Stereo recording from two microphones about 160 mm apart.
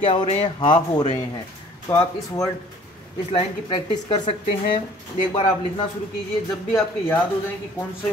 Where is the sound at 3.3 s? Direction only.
30° left (ahead or behind).